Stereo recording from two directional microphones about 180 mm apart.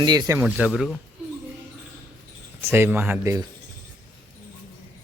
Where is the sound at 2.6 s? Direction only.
15° right (ahead or behind).